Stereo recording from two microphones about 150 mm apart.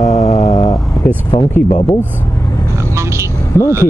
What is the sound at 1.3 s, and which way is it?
Speech, 35° left (ahead or behind).